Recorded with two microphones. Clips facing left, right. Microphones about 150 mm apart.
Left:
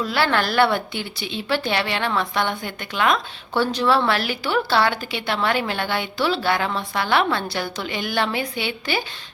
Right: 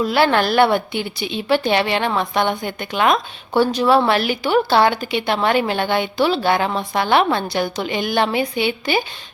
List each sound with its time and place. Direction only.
0.0 s speech: 15° right (ahead or behind)